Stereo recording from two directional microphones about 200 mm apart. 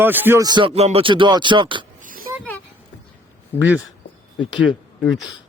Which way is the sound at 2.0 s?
45° right (ahead or behind).